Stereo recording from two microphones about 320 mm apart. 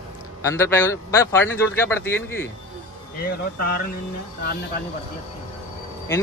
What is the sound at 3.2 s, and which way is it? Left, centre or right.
Speech, left.